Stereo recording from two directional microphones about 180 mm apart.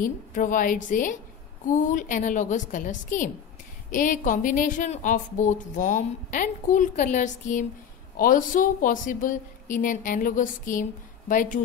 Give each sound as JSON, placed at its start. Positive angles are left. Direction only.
{"t": 0.0, "sound": "a woman's voice", "side_deg": 50}